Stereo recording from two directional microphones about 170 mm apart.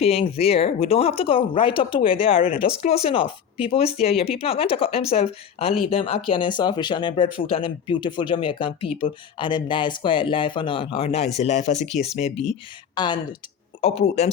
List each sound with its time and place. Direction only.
0.0 s speech: 35° left (ahead or behind)
12.9 s speech: 25° left (ahead or behind)
13.8 s speech: 40° left (ahead or behind)